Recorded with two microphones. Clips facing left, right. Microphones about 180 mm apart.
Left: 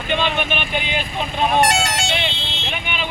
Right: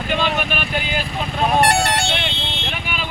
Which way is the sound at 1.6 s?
60° right (ahead or behind).